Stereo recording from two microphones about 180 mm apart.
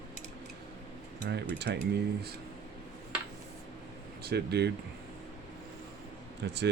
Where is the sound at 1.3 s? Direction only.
70° right (ahead or behind).